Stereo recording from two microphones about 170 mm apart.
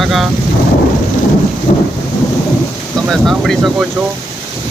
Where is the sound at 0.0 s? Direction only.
Centre (ahead or behind).